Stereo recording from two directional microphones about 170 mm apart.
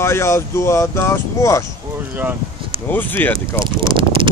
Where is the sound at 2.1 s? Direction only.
10° right (ahead or behind).